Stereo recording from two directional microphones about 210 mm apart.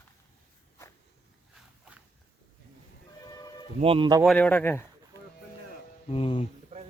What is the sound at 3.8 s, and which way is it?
Speech, 25° right (ahead or behind).